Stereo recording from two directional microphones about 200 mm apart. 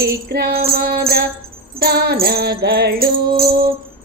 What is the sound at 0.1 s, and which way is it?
Music, 50° right (ahead or behind).